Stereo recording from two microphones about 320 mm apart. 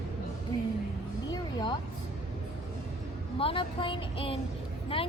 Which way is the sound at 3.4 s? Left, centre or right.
Centre.